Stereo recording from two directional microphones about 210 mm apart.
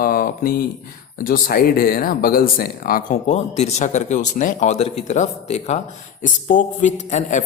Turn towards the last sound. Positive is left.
turn(degrees=35)  # may be behind; listen again after turning